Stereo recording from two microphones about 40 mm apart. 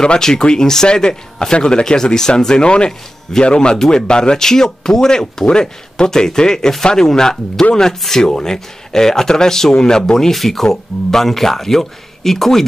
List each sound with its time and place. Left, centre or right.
0.0 s speech: centre